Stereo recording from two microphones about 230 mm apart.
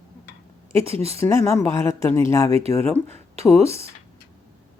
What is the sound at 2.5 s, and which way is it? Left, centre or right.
Speech, right.